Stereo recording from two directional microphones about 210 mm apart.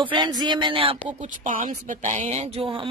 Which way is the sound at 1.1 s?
35° right (ahead or behind).